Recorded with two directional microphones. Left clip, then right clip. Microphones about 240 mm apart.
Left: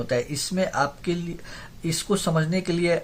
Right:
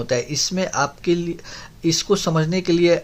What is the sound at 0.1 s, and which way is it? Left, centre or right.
Speech, right.